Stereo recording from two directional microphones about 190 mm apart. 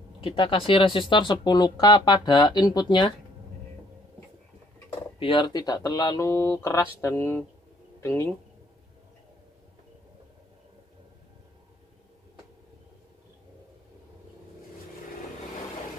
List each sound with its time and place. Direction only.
0.2 s speech: 25° left (ahead or behind)
5.2 s speech: 25° left (ahead or behind)